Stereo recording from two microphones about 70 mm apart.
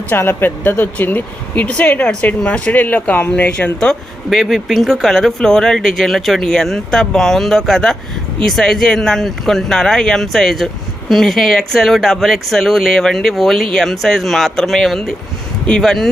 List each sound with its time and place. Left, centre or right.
0.1 s speech: left; by 3.9 s centre
4.3 s speech: centre